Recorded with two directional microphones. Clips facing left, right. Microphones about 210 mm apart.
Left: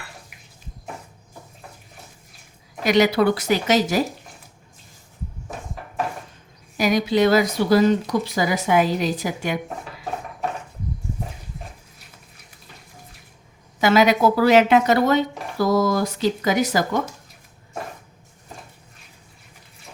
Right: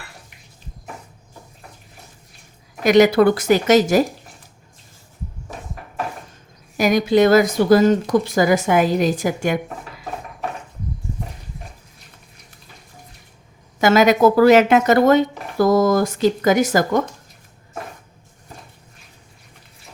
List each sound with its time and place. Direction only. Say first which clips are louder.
2.8 s speech: right 5 dB; 50° right (ahead or behind)
6.7 s speech: right 4 dB; 50° right (ahead or behind)
13.8 s speech: right 3 dB; 45° right (ahead or behind)